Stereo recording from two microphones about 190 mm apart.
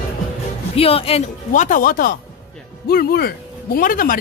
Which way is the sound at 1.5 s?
45° left (ahead or behind).